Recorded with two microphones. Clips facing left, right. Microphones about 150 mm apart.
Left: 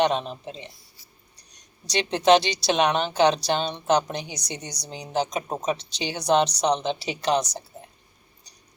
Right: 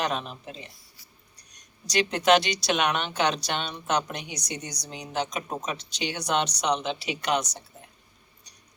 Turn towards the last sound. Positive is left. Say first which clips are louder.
# left 3 dB
turn(degrees=30)  # may be behind; listen again after turning